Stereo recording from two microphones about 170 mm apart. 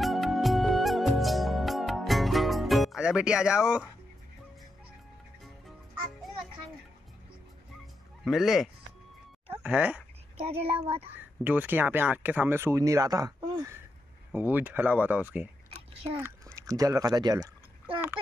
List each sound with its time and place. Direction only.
0.0 s music: centre (ahead or behind)
8.3 s speech: centre (ahead or behind)
10.3 s a child's voice: 35° right (ahead or behind)
11.4 s speech: 10° right (ahead or behind)
14.3 s speech: 10° right (ahead or behind)
15.9 s a child's voice: 35° right (ahead or behind)
16.2 s speech: 15° right (ahead or behind)